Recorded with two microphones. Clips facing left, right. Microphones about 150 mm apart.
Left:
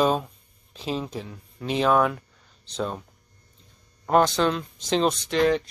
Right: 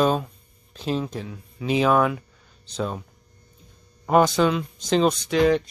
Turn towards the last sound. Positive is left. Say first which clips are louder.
# right 2 dB
turn(degrees=0)  # may be behind; listen again after turning